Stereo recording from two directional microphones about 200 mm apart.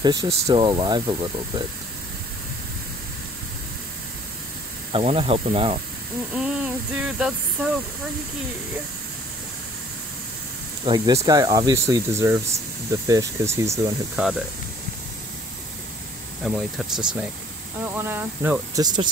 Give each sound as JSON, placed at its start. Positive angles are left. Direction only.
{"t": 0.0, "sound": "speech", "side_deg": -20}
{"t": 4.9, "sound": "speech", "side_deg": -25}
{"t": 6.3, "sound": "speech", "side_deg": -5}
{"t": 10.9, "sound": "speech", "side_deg": -25}
{"t": 16.4, "sound": "speech", "side_deg": 0}
{"t": 17.8, "sound": "speech", "side_deg": -10}